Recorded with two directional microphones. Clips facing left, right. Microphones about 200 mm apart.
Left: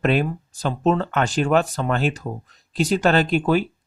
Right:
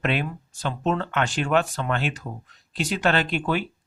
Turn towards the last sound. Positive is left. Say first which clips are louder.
# left 6 dB
turn(degrees=40)  # may be behind; listen again after turning